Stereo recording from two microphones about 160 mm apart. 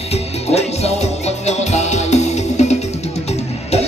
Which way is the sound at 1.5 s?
45° left (ahead or behind).